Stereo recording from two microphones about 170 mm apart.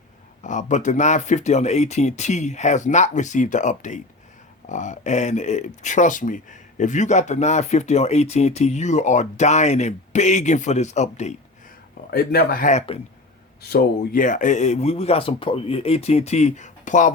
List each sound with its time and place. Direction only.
0.4 s speech: 45° left (ahead or behind)
12.1 s speech: 65° left (ahead or behind)
12.7 s speech: 35° left (ahead or behind)
13.6 s speech: 70° left (ahead or behind); by 17.1 s 45° left (ahead or behind)